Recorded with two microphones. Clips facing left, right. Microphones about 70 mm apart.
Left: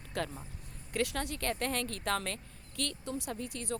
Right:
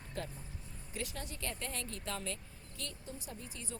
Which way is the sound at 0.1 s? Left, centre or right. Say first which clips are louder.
Left 7 dB; left.